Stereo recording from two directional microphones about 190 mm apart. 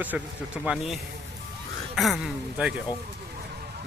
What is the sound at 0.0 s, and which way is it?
Speech, 10° right (ahead or behind).